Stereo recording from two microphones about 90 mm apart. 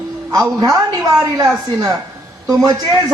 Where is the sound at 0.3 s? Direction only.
45° right (ahead or behind).